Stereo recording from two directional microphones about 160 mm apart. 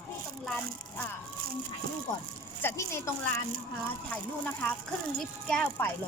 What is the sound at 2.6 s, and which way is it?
Speech, 15° left (ahead or behind).